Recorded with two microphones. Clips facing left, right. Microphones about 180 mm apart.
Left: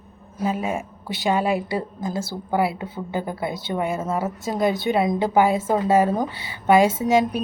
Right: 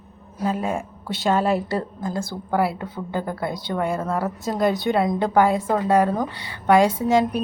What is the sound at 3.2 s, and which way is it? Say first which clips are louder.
Speech: even; 20° left (ahead or behind).